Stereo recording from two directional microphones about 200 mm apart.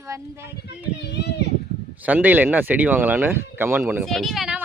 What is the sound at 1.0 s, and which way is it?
Children playing, 55° left (ahead or behind).